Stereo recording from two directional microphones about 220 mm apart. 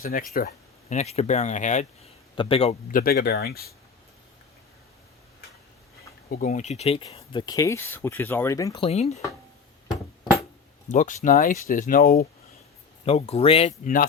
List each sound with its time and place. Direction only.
0.0 s speech: 40° left (ahead or behind); by 2.7 s 25° left (ahead or behind)
2.9 s speech: 45° left (ahead or behind)
6.4 s speech: 35° left (ahead or behind)
10.8 s speech: 35° left (ahead or behind)
13.1 s speech: 25° left (ahead or behind)